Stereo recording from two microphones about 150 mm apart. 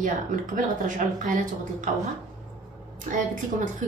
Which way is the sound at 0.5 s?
55° right (ahead or behind).